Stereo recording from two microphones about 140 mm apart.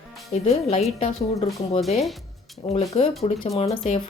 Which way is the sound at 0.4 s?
50° left (ahead or behind).